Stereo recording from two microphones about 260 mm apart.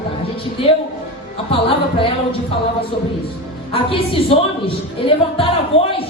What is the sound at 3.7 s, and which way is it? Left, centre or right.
Speech, left.